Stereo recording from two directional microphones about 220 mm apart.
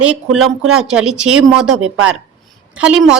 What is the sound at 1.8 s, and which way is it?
Speech, 70° right (ahead or behind).